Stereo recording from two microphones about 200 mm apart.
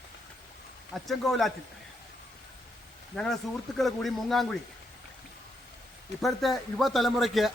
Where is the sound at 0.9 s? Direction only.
Centre (ahead or behind).